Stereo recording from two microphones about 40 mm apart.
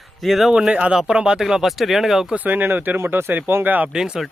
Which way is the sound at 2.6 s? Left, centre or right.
Right.